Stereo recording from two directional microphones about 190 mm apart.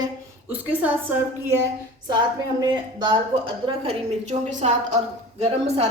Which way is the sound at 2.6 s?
25° right (ahead or behind).